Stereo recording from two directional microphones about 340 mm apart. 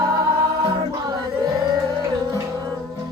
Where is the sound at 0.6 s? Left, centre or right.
Centre.